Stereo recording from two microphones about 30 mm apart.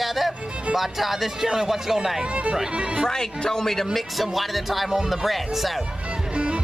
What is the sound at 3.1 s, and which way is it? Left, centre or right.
Speech, centre.